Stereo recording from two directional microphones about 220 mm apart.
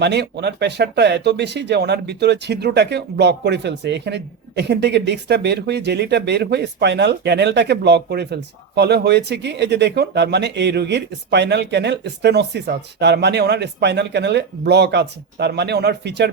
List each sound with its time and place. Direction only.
0.0 s speech: 50° right (ahead or behind)